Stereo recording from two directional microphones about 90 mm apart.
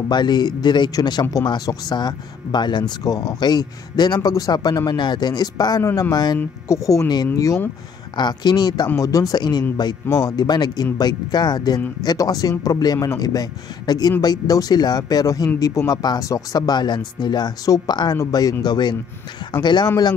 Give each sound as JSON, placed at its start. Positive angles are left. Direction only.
{"t": 0.1, "sound": "speech", "side_deg": 55}
{"t": 6.7, "sound": "speech", "side_deg": 35}
{"t": 8.2, "sound": "speech", "side_deg": 55}
{"t": 8.9, "sound": "speech", "side_deg": 40}
{"t": 9.4, "sound": "speech", "side_deg": 50}